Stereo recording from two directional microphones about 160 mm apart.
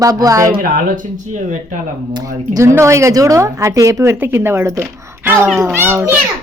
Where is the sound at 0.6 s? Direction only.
60° right (ahead or behind).